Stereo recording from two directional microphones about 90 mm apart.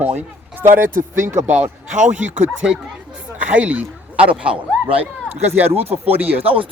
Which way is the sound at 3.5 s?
15° right (ahead or behind).